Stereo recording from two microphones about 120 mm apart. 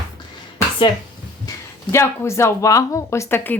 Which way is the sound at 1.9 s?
25° left (ahead or behind).